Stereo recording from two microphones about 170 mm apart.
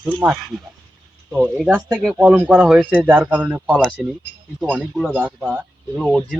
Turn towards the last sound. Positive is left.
turn(degrees=0)  # may be behind; listen again after turning